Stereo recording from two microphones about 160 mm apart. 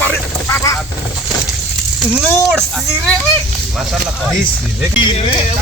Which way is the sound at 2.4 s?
5° left (ahead or behind).